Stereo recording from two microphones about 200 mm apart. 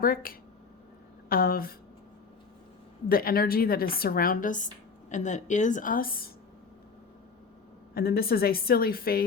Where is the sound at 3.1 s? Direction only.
50° left (ahead or behind).